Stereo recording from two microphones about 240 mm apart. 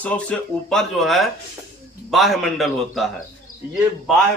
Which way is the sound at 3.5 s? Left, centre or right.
Left.